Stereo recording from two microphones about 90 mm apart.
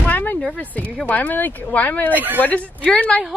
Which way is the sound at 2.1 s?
20° right (ahead or behind).